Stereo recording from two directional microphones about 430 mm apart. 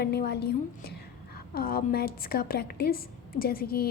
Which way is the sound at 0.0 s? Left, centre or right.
Left.